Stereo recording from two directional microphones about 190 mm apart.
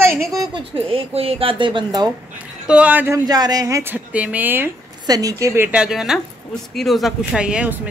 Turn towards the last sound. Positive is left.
turn(degrees=-5)  # may be behind; listen again after turning